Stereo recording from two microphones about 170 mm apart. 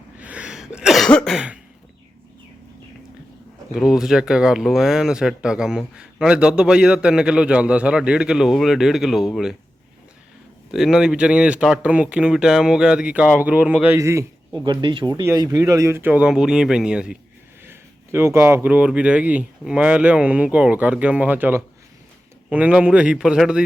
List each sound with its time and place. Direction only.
0.2 s cough: 10° right (ahead or behind)
3.8 s speech: 5° right (ahead or behind)
10.7 s speech: centre (ahead or behind)